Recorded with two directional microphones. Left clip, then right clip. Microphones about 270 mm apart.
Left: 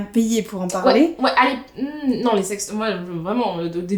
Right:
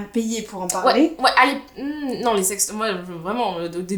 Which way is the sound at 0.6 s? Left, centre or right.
Left.